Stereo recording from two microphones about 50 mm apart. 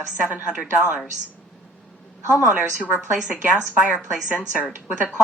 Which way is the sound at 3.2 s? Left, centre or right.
Right.